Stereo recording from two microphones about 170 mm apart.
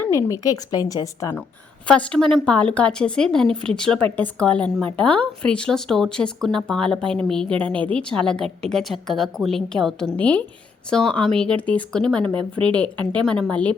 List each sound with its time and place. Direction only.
0.0 s speech: 15° left (ahead or behind)
1.9 s a woman's voice: 5° left (ahead or behind)